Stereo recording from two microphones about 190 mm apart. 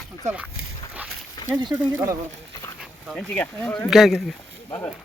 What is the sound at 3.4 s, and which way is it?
Speech, 10° left (ahead or behind).